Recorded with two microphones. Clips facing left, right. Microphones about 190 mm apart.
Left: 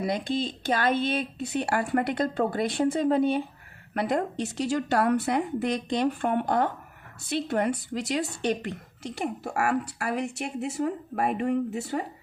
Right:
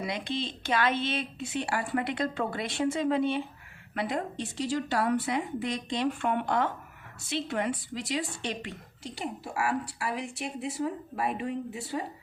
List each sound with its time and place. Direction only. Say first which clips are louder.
0.0 s a woman's voice: left 5 dB; 45° left (ahead or behind)